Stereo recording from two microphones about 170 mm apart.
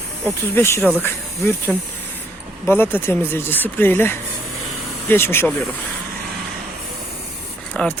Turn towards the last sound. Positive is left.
turn(degrees=5)  # may be behind; listen again after turning